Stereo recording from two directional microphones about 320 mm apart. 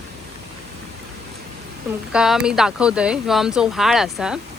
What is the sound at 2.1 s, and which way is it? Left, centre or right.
Speech, centre.